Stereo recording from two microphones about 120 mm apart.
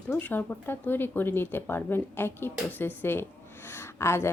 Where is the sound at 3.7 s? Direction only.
20° left (ahead or behind).